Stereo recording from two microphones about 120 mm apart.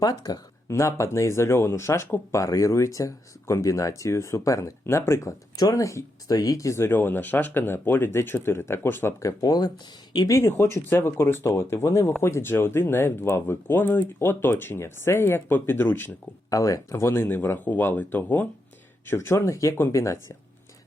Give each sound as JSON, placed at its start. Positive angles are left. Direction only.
{"t": 0.0, "sound": "speech", "side_deg": 30}
{"t": 9.4, "sound": "speech", "side_deg": 35}
{"t": 16.5, "sound": "speech", "side_deg": 30}